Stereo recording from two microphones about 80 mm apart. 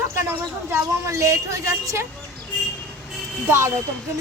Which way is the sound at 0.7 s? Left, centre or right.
Right.